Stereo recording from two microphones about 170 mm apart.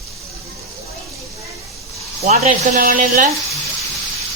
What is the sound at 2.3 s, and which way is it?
Speech, 55° right (ahead or behind).